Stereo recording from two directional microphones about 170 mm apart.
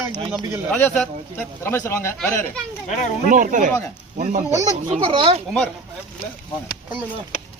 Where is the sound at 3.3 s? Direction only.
50° right (ahead or behind).